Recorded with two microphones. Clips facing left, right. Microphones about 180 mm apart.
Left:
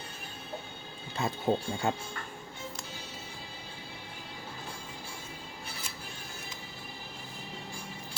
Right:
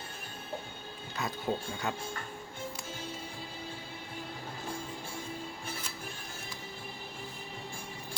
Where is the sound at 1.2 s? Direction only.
25° left (ahead or behind).